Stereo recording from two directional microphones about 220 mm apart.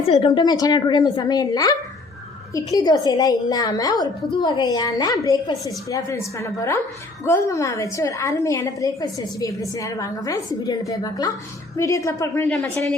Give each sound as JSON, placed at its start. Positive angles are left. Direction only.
{"t": 0.0, "sound": "a woman's voice", "side_deg": 25}
{"t": 2.7, "sound": "a woman's voice", "side_deg": 15}